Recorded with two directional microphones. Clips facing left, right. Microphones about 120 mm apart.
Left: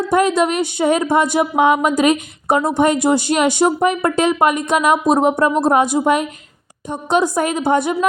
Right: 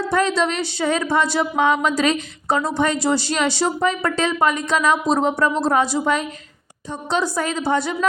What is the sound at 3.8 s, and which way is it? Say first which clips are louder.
Speech: left 5 dB; 20° left (ahead or behind).